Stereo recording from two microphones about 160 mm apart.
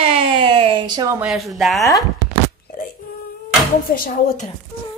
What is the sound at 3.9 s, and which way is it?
Speech, 60° left (ahead or behind).